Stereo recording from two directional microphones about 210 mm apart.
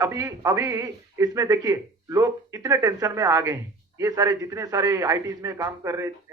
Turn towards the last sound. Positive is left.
turn(degrees=-15)  # may be behind; listen again after turning